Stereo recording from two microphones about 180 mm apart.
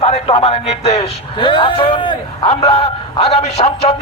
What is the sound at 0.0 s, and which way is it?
Speech, 35° left (ahead or behind).